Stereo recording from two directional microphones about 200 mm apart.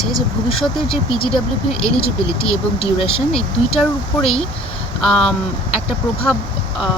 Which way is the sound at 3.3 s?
Centre (ahead or behind).